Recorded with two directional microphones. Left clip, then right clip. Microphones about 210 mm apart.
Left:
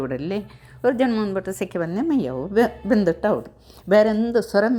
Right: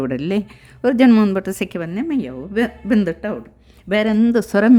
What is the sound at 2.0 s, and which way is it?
A man's voice, centre (ahead or behind).